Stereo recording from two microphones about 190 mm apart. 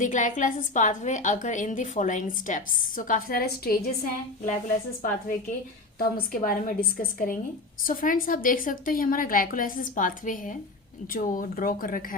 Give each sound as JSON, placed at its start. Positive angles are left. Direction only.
{"t": 0.0, "sound": "a woman's voice", "side_deg": 40}
{"t": 6.3, "sound": "a woman's voice", "side_deg": 50}